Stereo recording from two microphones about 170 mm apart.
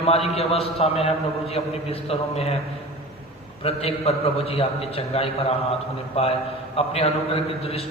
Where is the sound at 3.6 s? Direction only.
35° left (ahead or behind).